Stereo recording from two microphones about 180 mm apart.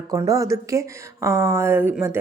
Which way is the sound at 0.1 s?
20° right (ahead or behind).